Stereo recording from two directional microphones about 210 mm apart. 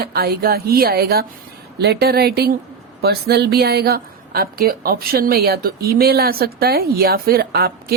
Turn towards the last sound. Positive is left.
turn(degrees=-50)  # may be behind; listen again after turning